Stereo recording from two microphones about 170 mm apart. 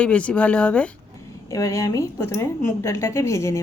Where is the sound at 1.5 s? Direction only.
20° left (ahead or behind).